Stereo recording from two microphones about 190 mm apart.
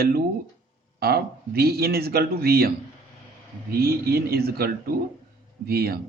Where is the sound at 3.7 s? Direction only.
55° right (ahead or behind).